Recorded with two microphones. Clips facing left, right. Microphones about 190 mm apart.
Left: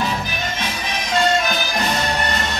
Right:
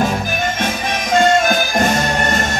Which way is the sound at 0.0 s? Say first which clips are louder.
Right 6 dB; 45° right (ahead or behind).